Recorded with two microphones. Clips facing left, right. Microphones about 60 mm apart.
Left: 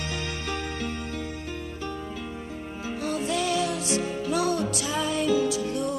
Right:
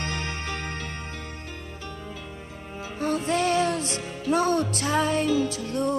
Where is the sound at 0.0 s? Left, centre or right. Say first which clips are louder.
Right 1 dB; right.